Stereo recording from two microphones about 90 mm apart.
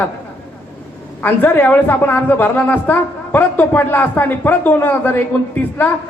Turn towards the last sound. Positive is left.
turn(degrees=20)  # may be behind; listen again after turning